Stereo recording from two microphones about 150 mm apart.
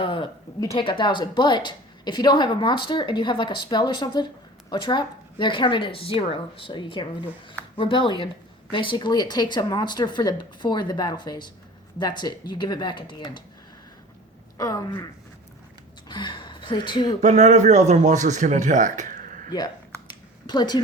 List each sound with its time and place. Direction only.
0.0 s speech: 35° left (ahead or behind)
14.6 s speech: 25° left (ahead or behind)
17.2 s a man's voice: 50° right (ahead or behind)
19.5 s speech: 25° left (ahead or behind)